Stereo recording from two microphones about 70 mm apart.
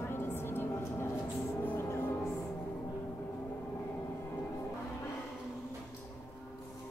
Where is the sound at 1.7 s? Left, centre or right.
Left.